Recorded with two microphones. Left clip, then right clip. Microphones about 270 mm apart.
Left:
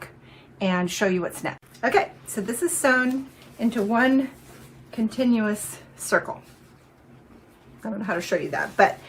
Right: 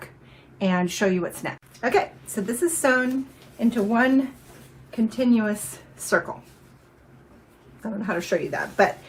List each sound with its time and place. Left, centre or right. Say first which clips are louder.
0.6 s a woman's voice: even; centre
7.8 s a woman's voice: even; centre